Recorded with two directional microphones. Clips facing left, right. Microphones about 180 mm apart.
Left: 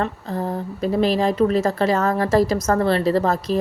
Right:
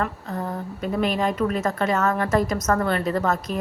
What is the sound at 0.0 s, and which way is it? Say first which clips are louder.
A woman's voice: left 3 dB; 30° left (ahead or behind).